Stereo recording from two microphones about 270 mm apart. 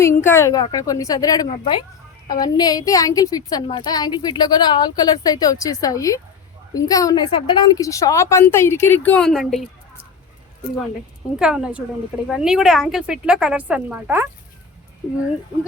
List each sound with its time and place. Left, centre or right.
0.0 s a woman's voice: centre
11.3 s speech: centre